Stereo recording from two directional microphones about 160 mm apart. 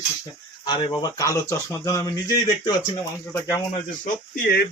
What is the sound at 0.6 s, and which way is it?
Speech, 30° left (ahead or behind).